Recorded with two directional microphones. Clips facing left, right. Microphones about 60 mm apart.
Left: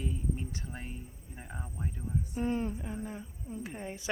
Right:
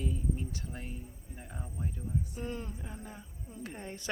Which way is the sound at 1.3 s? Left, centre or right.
Left.